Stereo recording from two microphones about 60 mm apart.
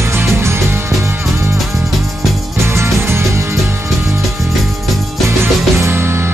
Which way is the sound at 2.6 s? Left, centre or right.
Right.